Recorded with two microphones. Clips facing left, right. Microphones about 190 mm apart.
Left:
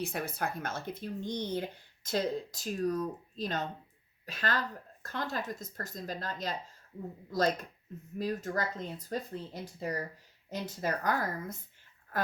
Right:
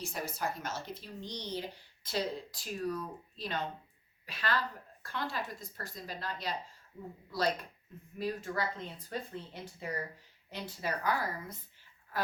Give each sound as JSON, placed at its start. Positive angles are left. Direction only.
{"t": 0.0, "sound": "speech", "side_deg": 60}